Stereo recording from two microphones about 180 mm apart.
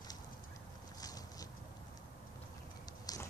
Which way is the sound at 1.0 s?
20° left (ahead or behind).